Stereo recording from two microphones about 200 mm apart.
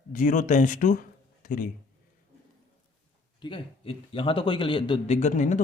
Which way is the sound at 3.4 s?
25° left (ahead or behind).